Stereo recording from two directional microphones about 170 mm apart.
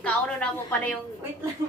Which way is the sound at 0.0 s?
10° left (ahead or behind).